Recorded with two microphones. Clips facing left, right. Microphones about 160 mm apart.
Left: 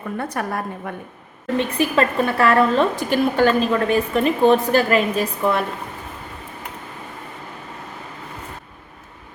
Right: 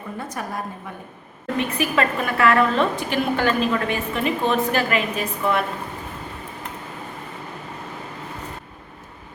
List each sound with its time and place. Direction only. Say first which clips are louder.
0.2 s a woman's voice: left 4 dB; 60° left (ahead or behind)
1.5 s a woman's voice: left 3 dB; 30° left (ahead or behind)